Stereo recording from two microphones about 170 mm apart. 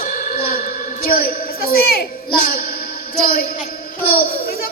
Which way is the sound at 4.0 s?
60° left (ahead or behind).